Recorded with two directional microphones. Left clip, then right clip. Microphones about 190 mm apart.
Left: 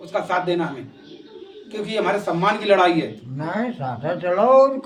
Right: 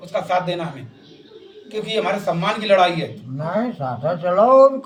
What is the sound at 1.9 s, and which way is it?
A man's voice, 20° left (ahead or behind).